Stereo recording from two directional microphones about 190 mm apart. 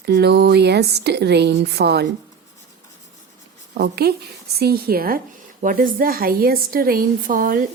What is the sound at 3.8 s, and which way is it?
A woman's voice, 55° right (ahead or behind).